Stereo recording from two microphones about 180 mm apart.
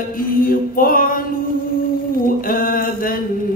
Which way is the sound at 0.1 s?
50° left (ahead or behind).